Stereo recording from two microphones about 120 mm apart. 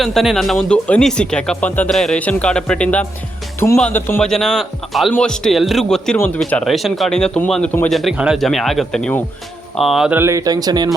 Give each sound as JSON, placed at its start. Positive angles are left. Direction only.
{"t": 0.0, "sound": "speech", "side_deg": 0}
{"t": 4.2, "sound": "speech", "side_deg": 5}
{"t": 7.9, "sound": "speech", "side_deg": 0}
{"t": 10.1, "sound": "speech", "side_deg": -20}